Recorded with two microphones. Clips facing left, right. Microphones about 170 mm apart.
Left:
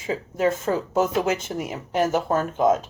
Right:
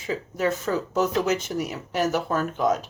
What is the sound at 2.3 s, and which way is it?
Speech, 25° left (ahead or behind).